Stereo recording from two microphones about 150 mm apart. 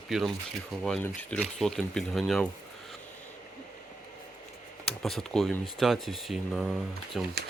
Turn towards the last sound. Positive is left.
turn(degrees=0)  # may be behind; listen again after turning